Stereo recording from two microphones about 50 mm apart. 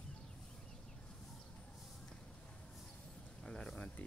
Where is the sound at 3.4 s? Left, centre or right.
Centre.